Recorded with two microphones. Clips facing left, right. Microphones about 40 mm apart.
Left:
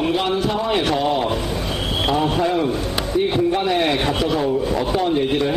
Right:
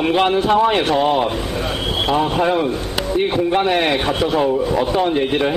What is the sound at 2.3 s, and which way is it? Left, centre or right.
A man's voice, right.